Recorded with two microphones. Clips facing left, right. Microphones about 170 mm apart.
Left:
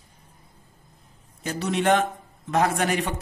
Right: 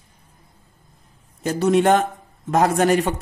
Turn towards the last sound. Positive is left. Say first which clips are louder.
# right 7 dB
turn(degrees=-45)  # may be behind; listen again after turning